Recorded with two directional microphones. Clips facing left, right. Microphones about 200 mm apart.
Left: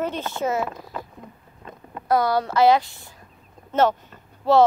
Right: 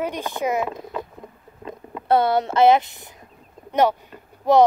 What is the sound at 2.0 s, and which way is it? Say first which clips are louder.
Speech: right 2 dB; 25° right (ahead or behind).